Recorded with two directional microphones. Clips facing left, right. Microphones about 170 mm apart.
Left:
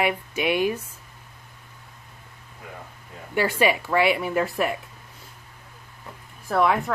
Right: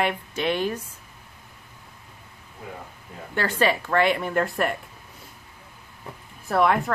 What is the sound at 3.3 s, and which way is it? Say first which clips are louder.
A woman's voice: left 2 dB; 10° left (ahead or behind).